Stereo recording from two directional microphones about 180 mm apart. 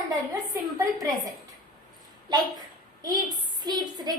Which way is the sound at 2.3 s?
25° right (ahead or behind).